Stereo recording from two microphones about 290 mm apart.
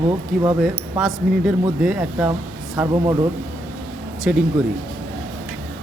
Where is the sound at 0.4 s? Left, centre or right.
Centre.